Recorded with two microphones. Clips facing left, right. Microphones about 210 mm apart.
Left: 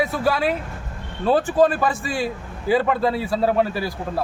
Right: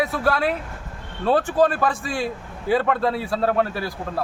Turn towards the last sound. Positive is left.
turn(degrees=0)  # may be behind; listen again after turning